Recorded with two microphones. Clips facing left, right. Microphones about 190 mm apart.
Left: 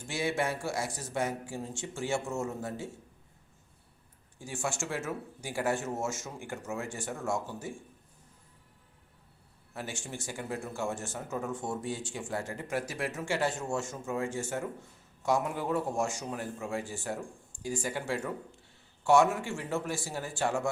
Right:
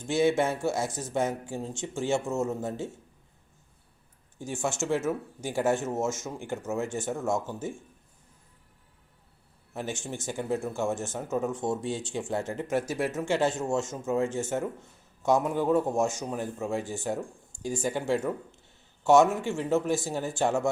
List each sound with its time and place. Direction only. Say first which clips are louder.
0.0 s speech: right 7 dB; 20° right (ahead or behind)
4.4 s speech: right 5 dB; 20° right (ahead or behind)
9.7 s speech: right 5 dB; 20° right (ahead or behind)